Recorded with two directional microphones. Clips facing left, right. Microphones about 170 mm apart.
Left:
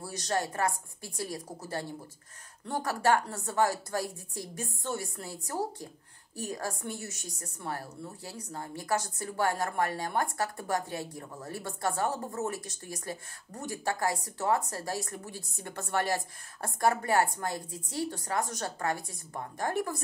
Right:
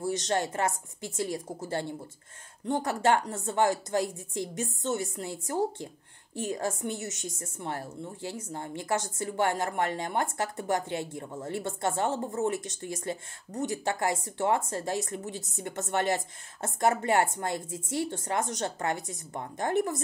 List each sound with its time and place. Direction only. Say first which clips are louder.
0.0 s a woman's voice: right 4 dB; 25° right (ahead or behind)